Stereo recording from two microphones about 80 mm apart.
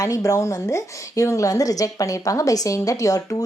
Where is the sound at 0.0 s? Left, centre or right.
Left.